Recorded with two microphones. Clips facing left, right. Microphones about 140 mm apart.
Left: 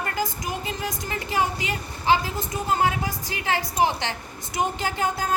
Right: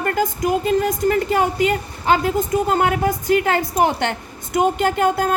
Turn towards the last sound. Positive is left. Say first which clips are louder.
# right 8 dB
turn(degrees=-55)  # may be behind; listen again after turning